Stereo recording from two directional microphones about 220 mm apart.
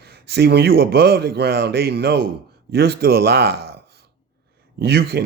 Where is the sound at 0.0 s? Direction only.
45° right (ahead or behind).